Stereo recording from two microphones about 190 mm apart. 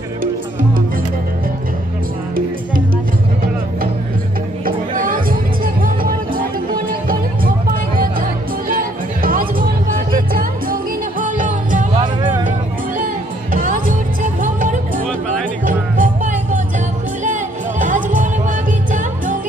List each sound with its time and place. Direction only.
0.2 s music: 45° right (ahead or behind)
4.6 s music: 45° right (ahead or behind)